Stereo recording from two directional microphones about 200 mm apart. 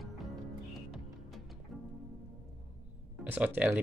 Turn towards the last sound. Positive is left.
turn(degrees=-5)  # may be behind; listen again after turning